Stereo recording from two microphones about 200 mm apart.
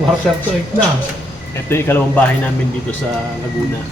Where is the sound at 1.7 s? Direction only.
10° left (ahead or behind).